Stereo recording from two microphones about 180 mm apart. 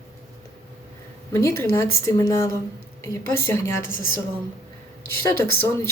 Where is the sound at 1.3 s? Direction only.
15° left (ahead or behind).